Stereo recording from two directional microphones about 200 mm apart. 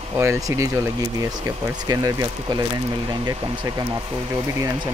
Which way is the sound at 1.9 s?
15° right (ahead or behind).